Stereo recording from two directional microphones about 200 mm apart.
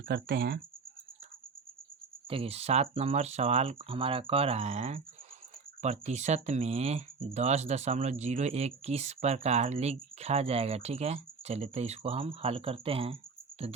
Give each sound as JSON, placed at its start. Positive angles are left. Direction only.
{"t": 0.1, "sound": "speech", "side_deg": -50}
{"t": 2.3, "sound": "speech", "side_deg": -30}